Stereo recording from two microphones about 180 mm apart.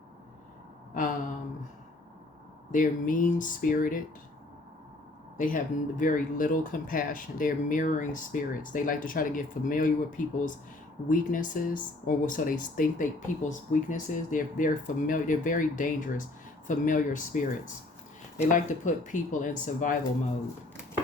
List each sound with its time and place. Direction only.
2.7 s speech: 45° left (ahead or behind)
5.4 s speech: 50° left (ahead or behind)